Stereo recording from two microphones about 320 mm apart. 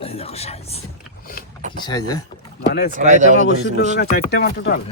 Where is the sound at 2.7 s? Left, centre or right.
Left.